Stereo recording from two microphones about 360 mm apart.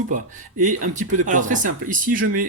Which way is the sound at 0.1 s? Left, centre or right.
Right.